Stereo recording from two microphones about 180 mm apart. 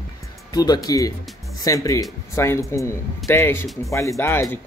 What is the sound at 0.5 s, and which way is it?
Speech, 20° left (ahead or behind).